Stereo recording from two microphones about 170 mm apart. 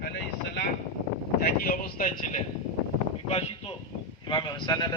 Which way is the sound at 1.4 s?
60° left (ahead or behind).